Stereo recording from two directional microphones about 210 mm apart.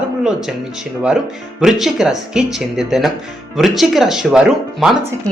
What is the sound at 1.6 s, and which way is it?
Speech, centre (ahead or behind).